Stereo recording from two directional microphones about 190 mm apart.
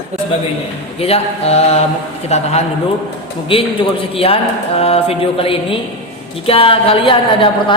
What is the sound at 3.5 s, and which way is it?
A woman's voice, 30° left (ahead or behind).